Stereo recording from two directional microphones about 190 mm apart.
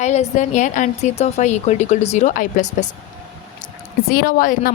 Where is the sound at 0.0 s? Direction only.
40° left (ahead or behind).